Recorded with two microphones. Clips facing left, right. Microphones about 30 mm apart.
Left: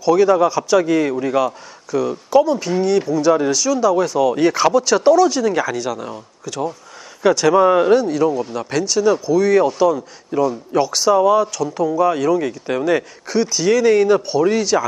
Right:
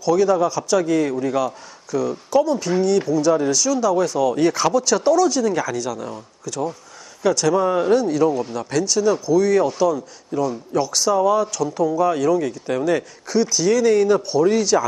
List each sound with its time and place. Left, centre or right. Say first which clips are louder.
0.0 s speech: left 4 dB; centre
8.0 s speech: left 1 dB; centre